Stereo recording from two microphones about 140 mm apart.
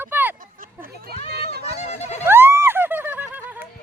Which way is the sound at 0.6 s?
90° right.